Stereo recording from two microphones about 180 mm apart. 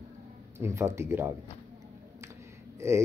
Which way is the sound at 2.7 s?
15° right (ahead or behind).